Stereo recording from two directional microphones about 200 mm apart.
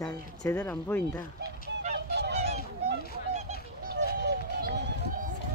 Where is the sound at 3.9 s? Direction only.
55° right (ahead or behind).